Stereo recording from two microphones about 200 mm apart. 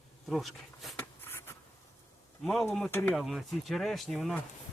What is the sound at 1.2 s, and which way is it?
Writing, 10° left (ahead or behind).